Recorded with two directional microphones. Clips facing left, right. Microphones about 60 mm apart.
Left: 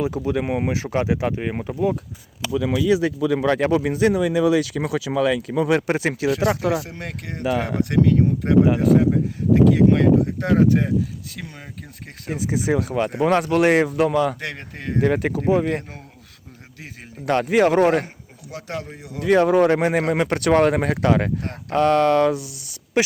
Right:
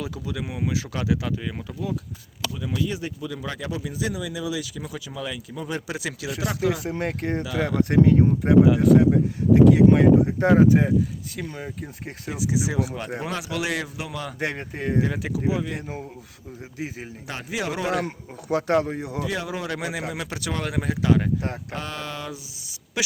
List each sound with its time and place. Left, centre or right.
0.2 s speech: left
2.6 s a man's voice: left
5.9 s speech: left
6.8 s speech: right
7.4 s speech: left
7.8 s speech: right
8.4 s speech: centre
12.3 s speech: left
14.4 s speech: centre
15.0 s speech: left
17.2 s speech: left
18.0 s speech: right
19.2 s speech: left